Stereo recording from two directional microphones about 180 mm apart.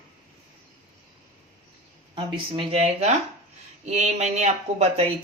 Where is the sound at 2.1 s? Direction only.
30° right (ahead or behind).